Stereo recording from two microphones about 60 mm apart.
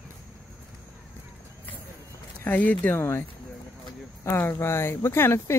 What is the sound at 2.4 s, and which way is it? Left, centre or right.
Speech, left.